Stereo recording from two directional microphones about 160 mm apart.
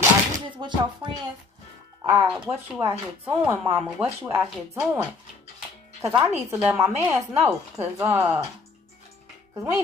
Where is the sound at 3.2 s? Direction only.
10° right (ahead or behind).